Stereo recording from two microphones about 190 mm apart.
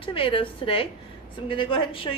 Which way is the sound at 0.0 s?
25° left (ahead or behind).